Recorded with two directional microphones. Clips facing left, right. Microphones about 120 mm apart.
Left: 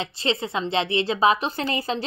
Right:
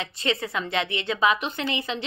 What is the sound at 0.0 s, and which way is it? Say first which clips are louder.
A woman's voice: left 2 dB; 30° left (ahead or behind).